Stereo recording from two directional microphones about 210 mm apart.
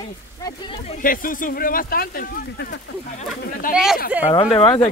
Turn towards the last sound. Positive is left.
turn(degrees=25)  # may be behind; listen again after turning